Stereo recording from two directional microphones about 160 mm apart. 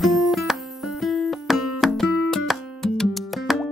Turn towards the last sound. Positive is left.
turn(degrees=0)  # may be behind; listen again after turning